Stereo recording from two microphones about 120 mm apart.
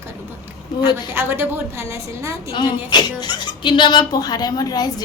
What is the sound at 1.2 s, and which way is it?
Speech, 15° right (ahead or behind).